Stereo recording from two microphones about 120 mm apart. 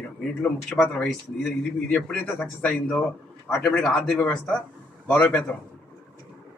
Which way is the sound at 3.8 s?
Centre (ahead or behind).